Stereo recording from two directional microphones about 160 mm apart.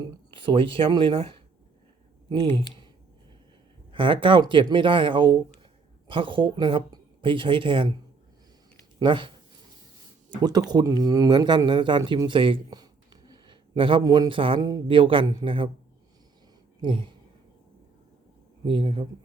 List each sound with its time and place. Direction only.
0.0 s speech: 30° right (ahead or behind)
2.5 s speech: 15° left (ahead or behind)
3.9 s speech: 30° right (ahead or behind)
9.0 s speech: 30° right (ahead or behind)
10.7 s speech: 25° right (ahead or behind)
16.8 s speech: 30° right (ahead or behind)
18.6 s speech: 30° right (ahead or behind)